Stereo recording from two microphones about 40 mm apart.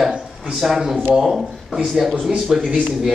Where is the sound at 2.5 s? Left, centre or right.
Centre.